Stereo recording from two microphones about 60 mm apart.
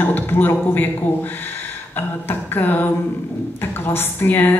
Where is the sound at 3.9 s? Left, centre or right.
Left.